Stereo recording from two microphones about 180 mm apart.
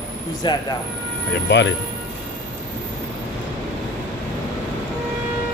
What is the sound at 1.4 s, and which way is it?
Speech, 80° left.